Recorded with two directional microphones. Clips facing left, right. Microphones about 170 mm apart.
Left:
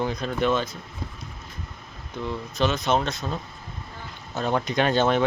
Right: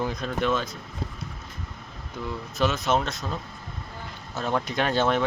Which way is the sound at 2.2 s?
5° right (ahead or behind).